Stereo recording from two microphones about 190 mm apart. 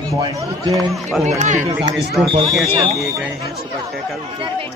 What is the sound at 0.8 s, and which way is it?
Speech, centre (ahead or behind).